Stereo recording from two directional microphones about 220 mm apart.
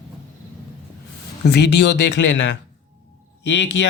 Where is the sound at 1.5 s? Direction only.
50° left (ahead or behind).